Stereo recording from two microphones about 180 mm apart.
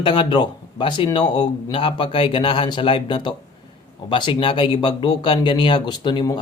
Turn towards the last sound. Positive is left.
turn(degrees=25)  # may be behind; listen again after turning